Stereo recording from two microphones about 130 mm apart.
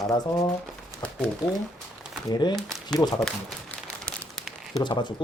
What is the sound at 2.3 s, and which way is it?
Speech, 30° left (ahead or behind).